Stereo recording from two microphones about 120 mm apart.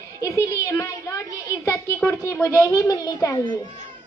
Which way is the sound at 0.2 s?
25° left (ahead or behind).